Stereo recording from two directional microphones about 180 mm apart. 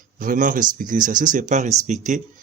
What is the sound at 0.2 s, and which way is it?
Speech, 50° right (ahead or behind).